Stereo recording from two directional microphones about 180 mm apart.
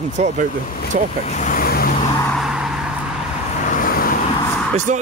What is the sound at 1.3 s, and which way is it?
Vehicle, 45° left (ahead or behind).